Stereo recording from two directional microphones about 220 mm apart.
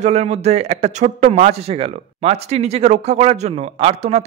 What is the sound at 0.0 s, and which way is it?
Speech, 30° right (ahead or behind).